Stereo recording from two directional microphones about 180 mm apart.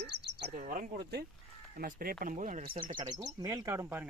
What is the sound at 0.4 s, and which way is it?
Speech, 50° right (ahead or behind).